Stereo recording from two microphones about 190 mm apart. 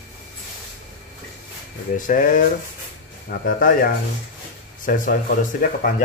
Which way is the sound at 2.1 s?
45° left (ahead or behind).